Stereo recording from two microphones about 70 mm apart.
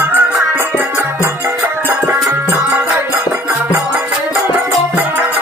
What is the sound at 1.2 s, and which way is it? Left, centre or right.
Music, right.